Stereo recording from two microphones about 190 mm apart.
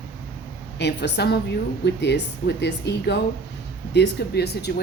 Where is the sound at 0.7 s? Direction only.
65° left (ahead or behind).